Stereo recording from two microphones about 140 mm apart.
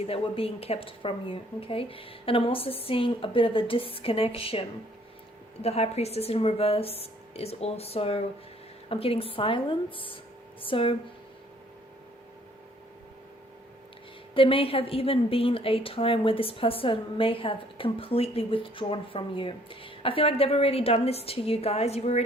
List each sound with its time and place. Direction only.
0.0 s a woman's voice: 45° left (ahead or behind)
5.6 s a woman's voice: 45° left (ahead or behind)
14.3 s a woman's voice: 40° left (ahead or behind)